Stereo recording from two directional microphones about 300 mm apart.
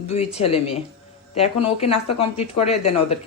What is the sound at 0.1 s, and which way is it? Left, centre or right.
Speech, left.